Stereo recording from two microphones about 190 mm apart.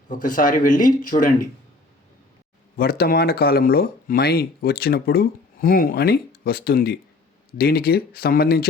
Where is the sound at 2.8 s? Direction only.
55° left (ahead or behind).